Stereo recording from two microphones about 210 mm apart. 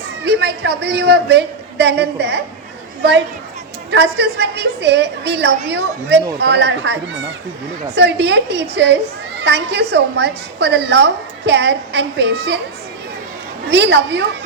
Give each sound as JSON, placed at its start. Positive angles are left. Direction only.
{"t": 0.3, "sound": "a woman's voice", "side_deg": -55}
{"t": 3.9, "sound": "a woman's voice", "side_deg": -55}
{"t": 7.9, "sound": "a woman's voice", "side_deg": -55}
{"t": 13.7, "sound": "a woman's voice", "side_deg": -55}